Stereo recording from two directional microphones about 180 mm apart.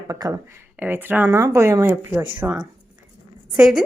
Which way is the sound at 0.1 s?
20° right (ahead or behind).